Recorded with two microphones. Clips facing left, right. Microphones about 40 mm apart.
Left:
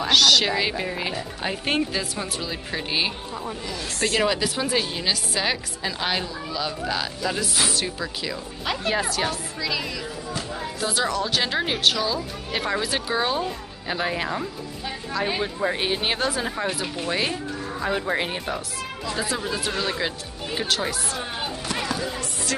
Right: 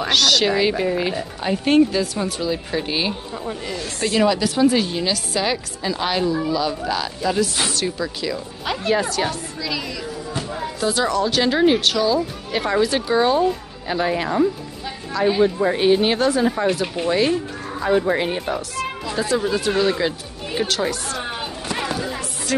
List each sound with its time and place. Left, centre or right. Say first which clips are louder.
0.1 s speech: right 1 dB; centre
4.2 s a woman's voice: right 10 dB; centre
16.8 s speech: right 6 dB; centre
17.1 s speech: right 7 dB; centre
22.5 s music: right 8 dB; centre